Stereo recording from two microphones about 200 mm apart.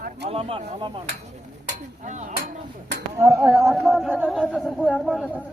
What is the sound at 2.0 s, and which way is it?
Speech, 35° right (ahead or behind).